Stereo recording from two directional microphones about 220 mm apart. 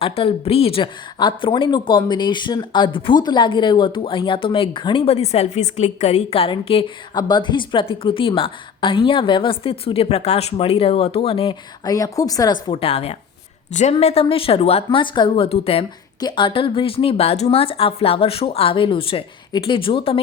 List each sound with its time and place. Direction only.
0.0 s speech: 25° left (ahead or behind)